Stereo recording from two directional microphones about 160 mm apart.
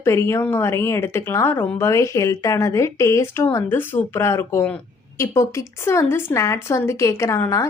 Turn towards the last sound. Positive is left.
turn(degrees=20)  # may be behind; listen again after turning